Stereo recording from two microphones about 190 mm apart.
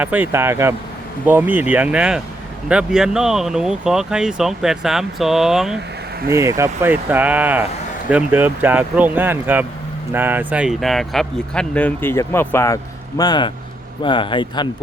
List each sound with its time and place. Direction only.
0.0 s speech: 10° right (ahead or behind)
6.3 s speech: 15° right (ahead or behind); by 14.7 s 25° left (ahead or behind)